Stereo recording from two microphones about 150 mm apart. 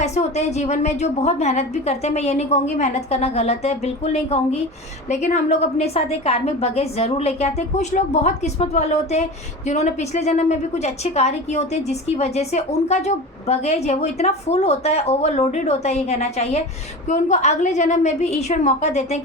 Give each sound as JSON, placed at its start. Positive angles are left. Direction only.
{"t": 0.0, "sound": "a woman's voice", "side_deg": 50}